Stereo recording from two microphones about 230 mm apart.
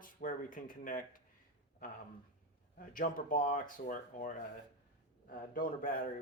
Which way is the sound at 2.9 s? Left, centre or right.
Left.